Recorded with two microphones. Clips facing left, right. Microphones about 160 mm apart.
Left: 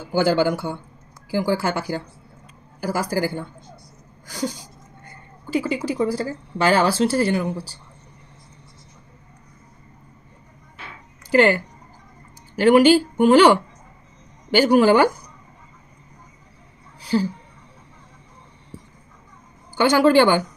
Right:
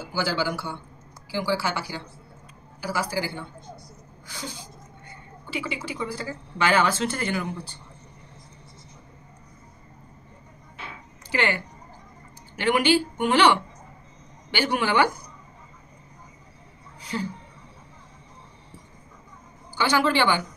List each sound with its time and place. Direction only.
0.1 s speech: 50° left (ahead or behind)
11.2 s speech: 45° left (ahead or behind)
17.0 s a sound: 35° left (ahead or behind)
19.7 s speech: 50° left (ahead or behind)